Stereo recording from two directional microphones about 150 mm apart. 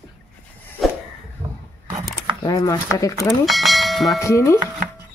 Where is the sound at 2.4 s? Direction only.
25° left (ahead or behind).